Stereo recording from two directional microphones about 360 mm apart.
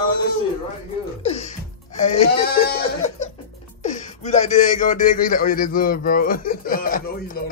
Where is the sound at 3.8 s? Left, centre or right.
Centre.